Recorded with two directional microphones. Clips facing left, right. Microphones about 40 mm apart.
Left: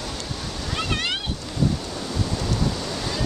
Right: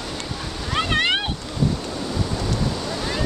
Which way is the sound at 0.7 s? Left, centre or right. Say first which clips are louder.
Right 6 dB; right.